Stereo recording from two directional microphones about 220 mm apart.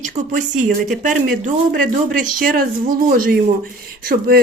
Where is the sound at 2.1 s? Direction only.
40° right (ahead or behind).